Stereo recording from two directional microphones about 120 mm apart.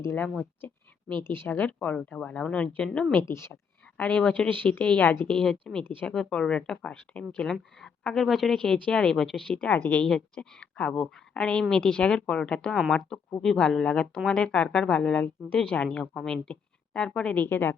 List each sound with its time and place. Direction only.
0.0 s speech: 20° left (ahead or behind)
5.4 s speech: 5° left (ahead or behind)